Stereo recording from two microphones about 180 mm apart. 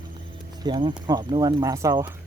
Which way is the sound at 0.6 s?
25° right (ahead or behind).